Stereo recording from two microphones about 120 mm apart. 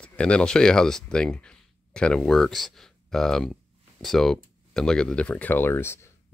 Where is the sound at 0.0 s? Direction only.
10° left (ahead or behind).